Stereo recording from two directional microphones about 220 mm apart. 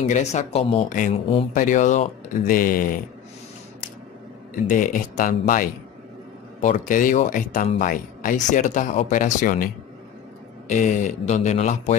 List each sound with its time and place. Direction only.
0.0 s speech: 30° left (ahead or behind)
4.6 s speech: 35° left (ahead or behind)
10.7 s speech: 35° left (ahead or behind)